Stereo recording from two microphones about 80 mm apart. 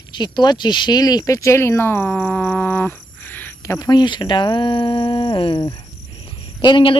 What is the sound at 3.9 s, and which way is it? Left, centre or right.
Speech, left.